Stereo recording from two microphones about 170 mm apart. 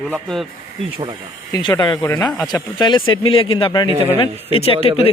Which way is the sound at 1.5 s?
25° left (ahead or behind).